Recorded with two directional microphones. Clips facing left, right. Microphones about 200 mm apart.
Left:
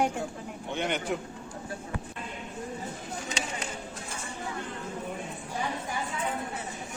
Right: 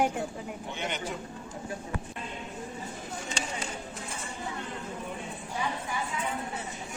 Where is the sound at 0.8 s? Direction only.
55° left (ahead or behind).